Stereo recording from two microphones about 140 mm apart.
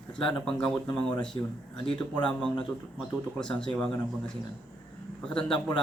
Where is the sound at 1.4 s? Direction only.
30° left (ahead or behind).